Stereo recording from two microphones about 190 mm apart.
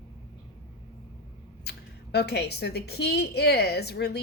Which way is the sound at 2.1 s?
60° left (ahead or behind).